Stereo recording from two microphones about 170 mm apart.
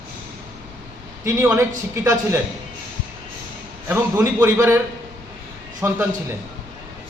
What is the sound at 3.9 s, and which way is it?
Speech, 15° right (ahead or behind).